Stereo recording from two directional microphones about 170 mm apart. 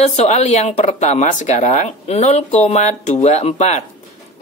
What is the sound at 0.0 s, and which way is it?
Speech, 40° left (ahead or behind).